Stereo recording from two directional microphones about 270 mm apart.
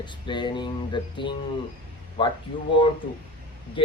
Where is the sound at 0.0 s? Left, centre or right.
Centre.